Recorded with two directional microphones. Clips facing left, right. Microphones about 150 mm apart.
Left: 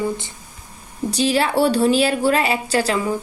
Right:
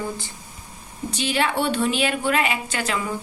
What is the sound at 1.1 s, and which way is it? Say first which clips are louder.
A woman's voice: left 5 dB; 35° left (ahead or behind).